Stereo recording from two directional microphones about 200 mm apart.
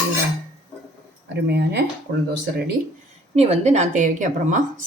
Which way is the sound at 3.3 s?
30° right (ahead or behind).